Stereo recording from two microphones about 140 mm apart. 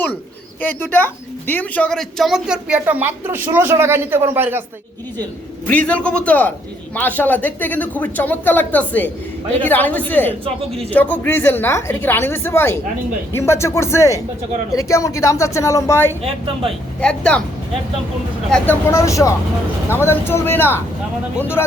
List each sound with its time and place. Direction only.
0.6 s a woman's voice: 15° left (ahead or behind); by 4.6 s 15° right (ahead or behind)
5.6 s speech: 10° left (ahead or behind)
16.6 s speech: 5° left (ahead or behind)
18.5 s speech: 10° left (ahead or behind)